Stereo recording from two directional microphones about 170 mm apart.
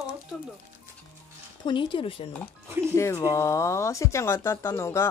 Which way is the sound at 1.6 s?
30° left (ahead or behind).